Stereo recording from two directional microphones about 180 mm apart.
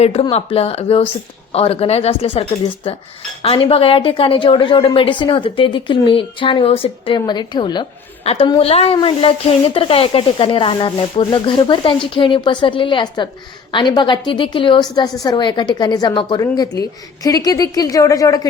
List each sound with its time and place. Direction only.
0.0 s speech: 35° left (ahead or behind)
3.4 s a woman's voice: 30° left (ahead or behind)